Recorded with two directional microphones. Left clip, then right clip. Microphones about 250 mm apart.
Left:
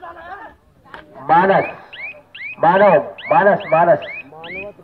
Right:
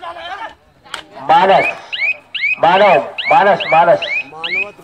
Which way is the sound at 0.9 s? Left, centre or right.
Right.